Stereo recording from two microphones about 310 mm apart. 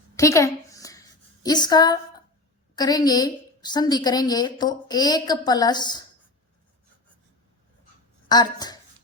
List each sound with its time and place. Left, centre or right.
0.2 s a sound: centre
2.7 s a woman's voice: centre
8.3 s a woman's voice: centre